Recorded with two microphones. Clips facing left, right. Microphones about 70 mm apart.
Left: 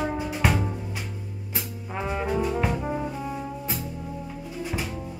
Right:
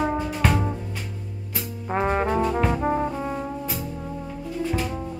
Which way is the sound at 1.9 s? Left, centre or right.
Right.